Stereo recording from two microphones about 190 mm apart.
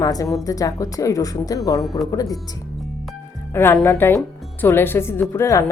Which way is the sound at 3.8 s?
10° left (ahead or behind).